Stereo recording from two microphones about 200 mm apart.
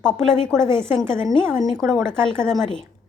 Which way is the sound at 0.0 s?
5° left (ahead or behind).